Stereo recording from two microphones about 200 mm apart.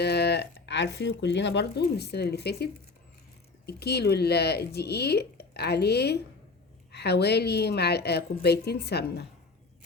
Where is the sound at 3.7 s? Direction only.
55° left (ahead or behind).